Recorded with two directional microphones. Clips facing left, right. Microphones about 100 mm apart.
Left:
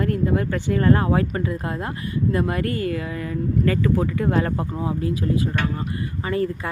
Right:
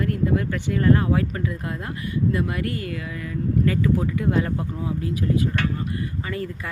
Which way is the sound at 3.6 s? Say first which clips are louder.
Left 2 dB; 55° left (ahead or behind).